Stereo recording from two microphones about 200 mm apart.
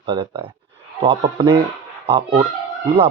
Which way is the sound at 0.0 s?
20° right (ahead or behind).